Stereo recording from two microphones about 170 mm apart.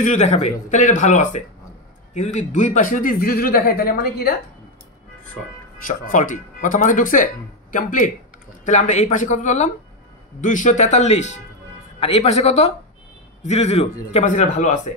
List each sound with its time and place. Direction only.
0.0 s speech: 45° left (ahead or behind); by 4.4 s 65° left (ahead or behind)
5.9 s a man's voice: 50° left (ahead or behind)